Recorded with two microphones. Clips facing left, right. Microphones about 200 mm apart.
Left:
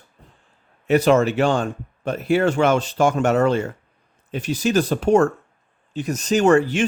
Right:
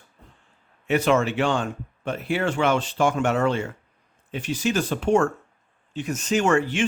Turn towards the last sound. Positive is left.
turn(degrees=40)  # may be behind; listen again after turning